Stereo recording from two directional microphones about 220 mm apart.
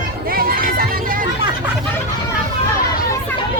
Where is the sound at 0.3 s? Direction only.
40° right (ahead or behind).